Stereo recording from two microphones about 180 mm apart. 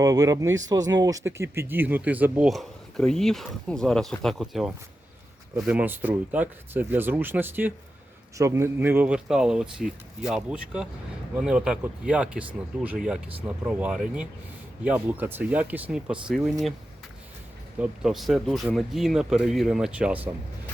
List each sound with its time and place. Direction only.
0.0 s speech: 20° right (ahead or behind)
2.5 s speech: centre (ahead or behind)
17.7 s speech: centre (ahead or behind)